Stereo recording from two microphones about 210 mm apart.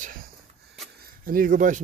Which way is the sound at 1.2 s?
40° right (ahead or behind).